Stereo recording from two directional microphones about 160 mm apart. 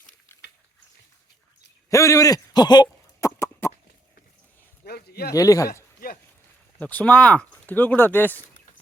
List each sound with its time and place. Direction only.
1.9 s a sound: 20° left (ahead or behind)
4.9 s speech: 75° left (ahead or behind)
5.3 s speech: 20° left (ahead or behind)
6.0 s speech: 65° left (ahead or behind)
6.7 s speech: 10° left (ahead or behind)